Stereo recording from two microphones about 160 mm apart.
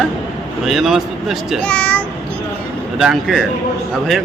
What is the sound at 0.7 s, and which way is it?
Speech, centre (ahead or behind).